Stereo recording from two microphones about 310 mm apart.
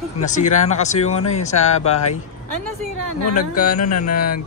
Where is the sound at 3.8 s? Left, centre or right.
Left.